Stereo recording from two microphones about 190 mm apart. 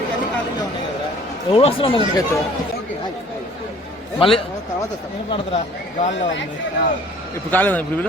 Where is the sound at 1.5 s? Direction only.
30° left (ahead or behind).